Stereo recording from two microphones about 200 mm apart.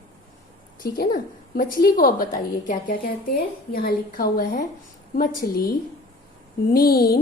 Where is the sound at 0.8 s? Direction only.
45° left (ahead or behind).